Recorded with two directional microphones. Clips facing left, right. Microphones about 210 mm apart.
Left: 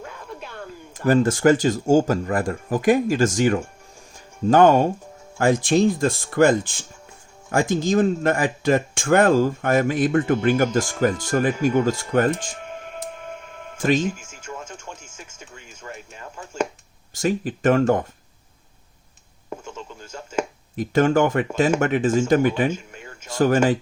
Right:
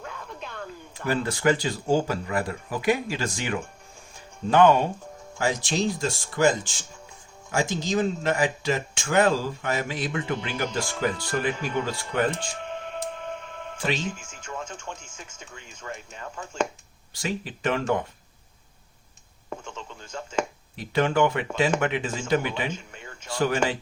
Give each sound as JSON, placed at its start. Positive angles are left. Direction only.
{"t": 0.0, "sound": "a sound", "side_deg": 10}
{"t": 0.9, "sound": "speech", "side_deg": 45}
{"t": 13.7, "sound": "speech", "side_deg": 45}
{"t": 14.3, "sound": "speech", "side_deg": 10}
{"t": 17.2, "sound": "speech", "side_deg": 50}
{"t": 19.5, "sound": "a sound", "side_deg": 10}
{"t": 20.7, "sound": "speech", "side_deg": 45}